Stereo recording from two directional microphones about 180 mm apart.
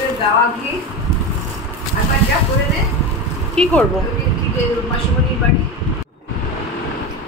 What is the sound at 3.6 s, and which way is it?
Speech, 5° left (ahead or behind).